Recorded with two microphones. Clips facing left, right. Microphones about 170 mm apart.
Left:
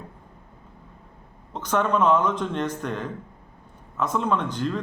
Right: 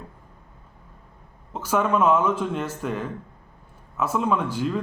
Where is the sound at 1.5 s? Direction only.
5° right (ahead or behind).